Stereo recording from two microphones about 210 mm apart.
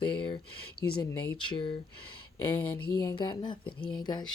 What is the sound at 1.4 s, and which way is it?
Speech, 20° left (ahead or behind).